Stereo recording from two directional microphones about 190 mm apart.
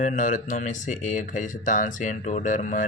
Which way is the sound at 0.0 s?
40° left (ahead or behind).